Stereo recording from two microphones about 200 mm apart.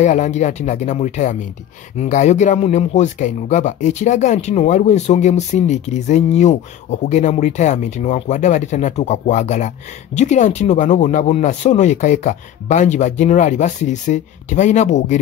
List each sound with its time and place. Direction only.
0.0 s speech: 35° left (ahead or behind)